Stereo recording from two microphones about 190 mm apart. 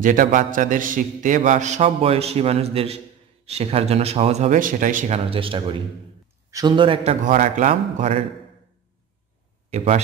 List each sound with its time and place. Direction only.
0.0 s a man's voice: 45° right (ahead or behind)
9.7 s speech: 35° right (ahead or behind)